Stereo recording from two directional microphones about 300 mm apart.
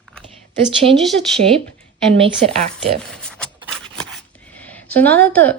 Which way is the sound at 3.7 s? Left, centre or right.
Centre.